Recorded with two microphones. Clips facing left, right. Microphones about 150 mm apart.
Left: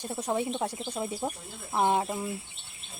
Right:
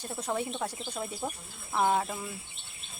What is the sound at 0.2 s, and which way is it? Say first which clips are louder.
Speech: left 3 dB; 20° left (ahead or behind).